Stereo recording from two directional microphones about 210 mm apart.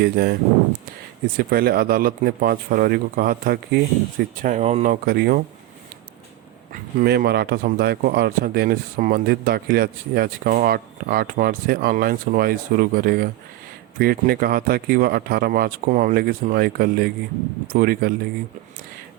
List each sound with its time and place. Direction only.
0.0 s speech: 50° right (ahead or behind)
1.4 s speech: 45° right (ahead or behind)
6.7 s speech: 45° right (ahead or behind)